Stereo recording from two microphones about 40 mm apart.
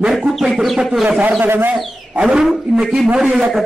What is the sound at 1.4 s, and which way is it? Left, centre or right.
Speech, right.